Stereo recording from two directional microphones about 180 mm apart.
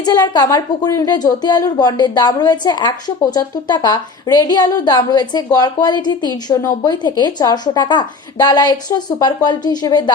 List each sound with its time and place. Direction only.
0.0 s a woman's voice: 20° left (ahead or behind)